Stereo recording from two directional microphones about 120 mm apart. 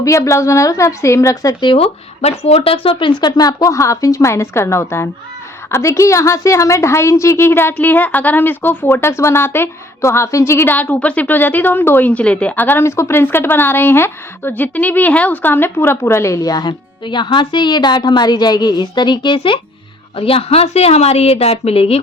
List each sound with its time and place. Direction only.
0.0 s a woman's voice: 25° left (ahead or behind)
1.7 s a woman's voice: 55° left (ahead or behind)